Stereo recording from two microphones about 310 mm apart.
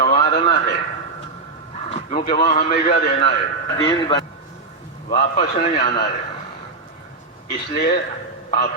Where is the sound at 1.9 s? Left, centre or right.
Centre.